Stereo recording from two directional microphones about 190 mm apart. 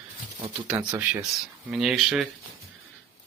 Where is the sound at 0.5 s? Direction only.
5° right (ahead or behind).